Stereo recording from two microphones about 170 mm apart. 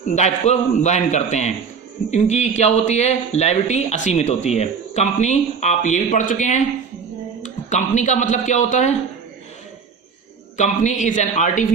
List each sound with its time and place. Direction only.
0.1 s a man's voice: 40° left (ahead or behind)
10.6 s a man's voice: 45° left (ahead or behind)